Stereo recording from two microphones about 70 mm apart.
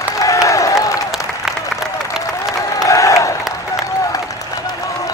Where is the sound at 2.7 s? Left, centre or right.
Left.